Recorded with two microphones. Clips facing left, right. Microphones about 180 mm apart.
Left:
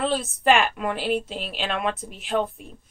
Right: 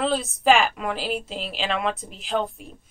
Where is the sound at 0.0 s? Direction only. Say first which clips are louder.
Right 1 dB; centre (ahead or behind).